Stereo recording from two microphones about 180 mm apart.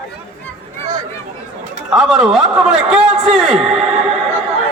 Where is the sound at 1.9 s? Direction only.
5° right (ahead or behind).